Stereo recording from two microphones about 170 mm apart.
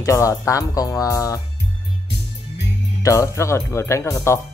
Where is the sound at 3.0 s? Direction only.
20° left (ahead or behind).